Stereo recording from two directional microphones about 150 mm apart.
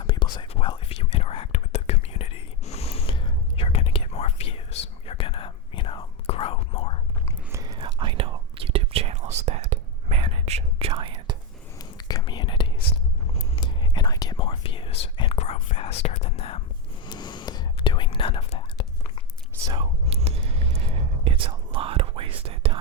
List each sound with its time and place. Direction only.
0.0 s whispering: 30° left (ahead or behind)
7.5 s whispering: 25° right (ahead or behind)
11.8 s whispering: 25° left (ahead or behind); by 16.6 s 40° left (ahead or behind)
17.1 s whispering: 30° left (ahead or behind)
19.7 s whispering: 40° right (ahead or behind)